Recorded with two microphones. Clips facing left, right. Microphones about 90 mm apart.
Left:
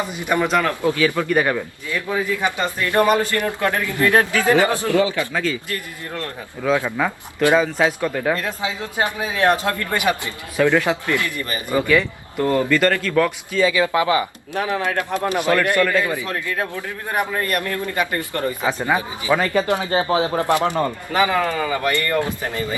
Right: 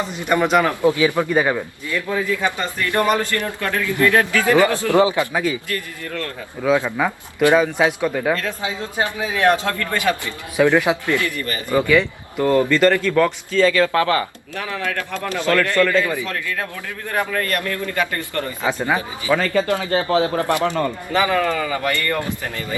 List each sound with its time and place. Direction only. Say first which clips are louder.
0.4 s a man's voice: right 5 dB; 10° right (ahead or behind)
1.9 s speech: right 1 dB; 20° left (ahead or behind)
4.9 s speech: right 3 dB; 20° right (ahead or behind)
5.6 s speech: right 2 dB; 20° left (ahead or behind)
6.6 s a man's voice: right 2 dB; 10° right (ahead or behind)
8.4 s speech: even; 20° left (ahead or behind)
10.6 s a man's voice: right 2 dB; 15° right (ahead or behind)
11.2 s speech: right 1 dB; 20° left (ahead or behind)
12.4 s a man's voice: right 2 dB; 15° right (ahead or behind)
12.6 s speech: right 2 dB; 5° left (ahead or behind)
13.5 s speech: right 2 dB; 10° left (ahead or behind)